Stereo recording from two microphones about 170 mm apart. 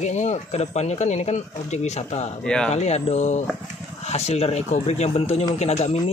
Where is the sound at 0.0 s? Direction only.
45° left (ahead or behind).